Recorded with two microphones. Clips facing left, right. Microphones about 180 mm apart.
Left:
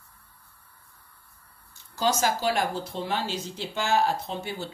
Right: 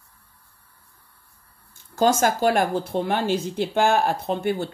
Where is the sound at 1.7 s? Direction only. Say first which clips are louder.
Right 6 dB; 50° right (ahead or behind).